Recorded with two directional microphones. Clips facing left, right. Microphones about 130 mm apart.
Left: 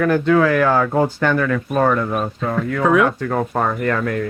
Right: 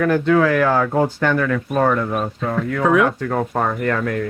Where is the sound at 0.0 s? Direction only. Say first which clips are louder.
Left 1 dB; 25° left (ahead or behind).